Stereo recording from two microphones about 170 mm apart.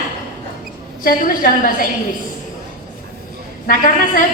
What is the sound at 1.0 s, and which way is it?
Speech, 55° left (ahead or behind).